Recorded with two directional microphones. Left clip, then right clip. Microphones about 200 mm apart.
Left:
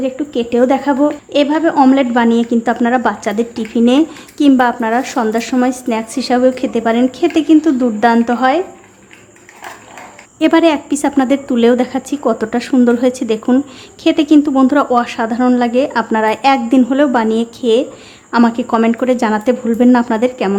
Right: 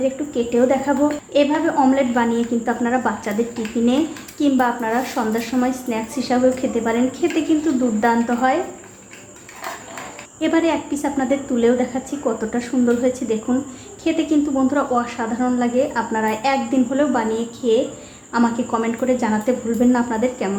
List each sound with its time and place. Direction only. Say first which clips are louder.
0.0 s a woman's voice: left 3 dB; 45° left (ahead or behind)
10.4 s a woman's voice: left 8 dB; 45° left (ahead or behind)